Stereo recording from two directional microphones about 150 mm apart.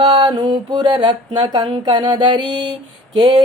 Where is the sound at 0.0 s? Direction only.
25° right (ahead or behind).